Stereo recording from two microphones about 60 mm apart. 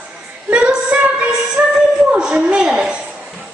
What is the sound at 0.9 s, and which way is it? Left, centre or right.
Music, right.